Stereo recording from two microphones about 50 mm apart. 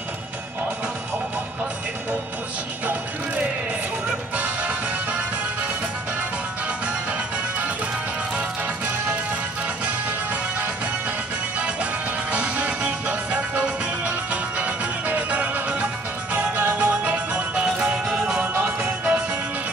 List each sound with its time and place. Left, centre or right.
7.1 s music: right
9.8 s music: right
11.5 s music: right
17.7 s music: centre